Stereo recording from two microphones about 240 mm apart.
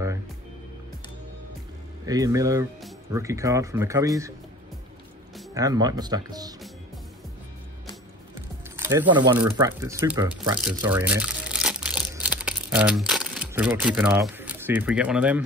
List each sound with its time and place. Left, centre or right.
2.0 s speech: centre
5.5 s speech: centre
8.7 s speech: centre
10.7 s crumpling: centre